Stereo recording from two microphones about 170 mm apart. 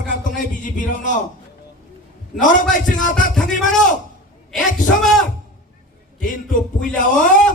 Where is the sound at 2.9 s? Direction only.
50° left (ahead or behind).